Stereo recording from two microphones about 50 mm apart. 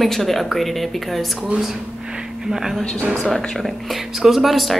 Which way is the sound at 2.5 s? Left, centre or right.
Centre.